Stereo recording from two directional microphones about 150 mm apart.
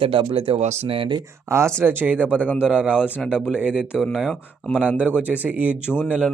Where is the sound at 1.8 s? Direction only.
15° right (ahead or behind).